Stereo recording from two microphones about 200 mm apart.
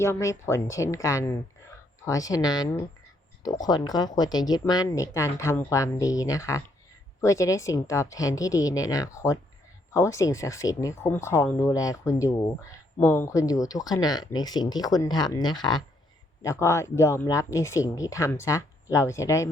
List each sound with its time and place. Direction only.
0.0 s speech: 15° left (ahead or behind)